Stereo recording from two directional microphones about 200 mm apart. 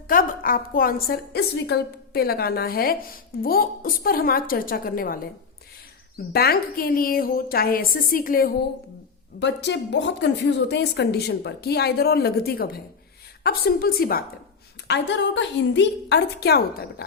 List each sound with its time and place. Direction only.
0.1 s a woman's voice: 45° left (ahead or behind)
6.3 s a woman's voice: 50° left (ahead or behind)
9.4 s a woman's voice: 60° left (ahead or behind)
14.8 s a woman's voice: 60° left (ahead or behind)